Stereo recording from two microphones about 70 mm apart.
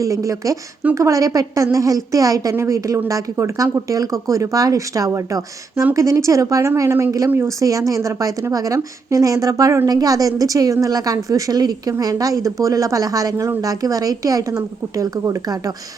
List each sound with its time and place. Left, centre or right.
0.0 s a woman's voice: right